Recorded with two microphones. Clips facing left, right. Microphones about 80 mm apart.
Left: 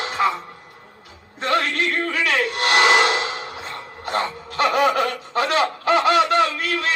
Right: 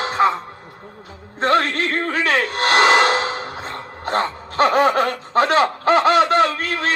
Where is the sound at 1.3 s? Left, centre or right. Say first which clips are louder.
Right 4 dB; right.